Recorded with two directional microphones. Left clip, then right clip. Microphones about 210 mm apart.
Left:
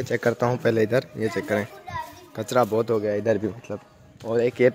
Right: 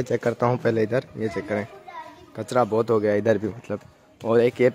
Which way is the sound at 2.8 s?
15° right (ahead or behind).